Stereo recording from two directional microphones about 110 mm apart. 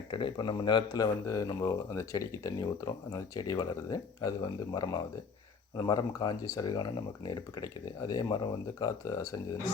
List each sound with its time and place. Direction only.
0.1 s speech: 45° left (ahead or behind)